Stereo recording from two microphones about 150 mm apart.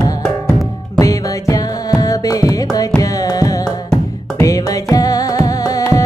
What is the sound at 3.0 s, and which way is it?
Carnatic music, 25° left (ahead or behind).